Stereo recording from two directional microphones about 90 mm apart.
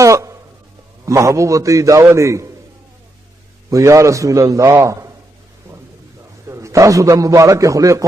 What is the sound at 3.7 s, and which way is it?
A man's voice, 35° right (ahead or behind).